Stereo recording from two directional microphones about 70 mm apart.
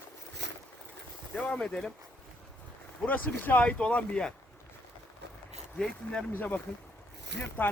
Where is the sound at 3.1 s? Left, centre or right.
Left.